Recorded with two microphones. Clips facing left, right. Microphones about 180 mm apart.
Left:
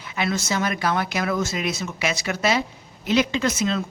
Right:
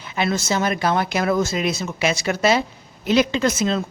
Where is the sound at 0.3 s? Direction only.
30° right (ahead or behind).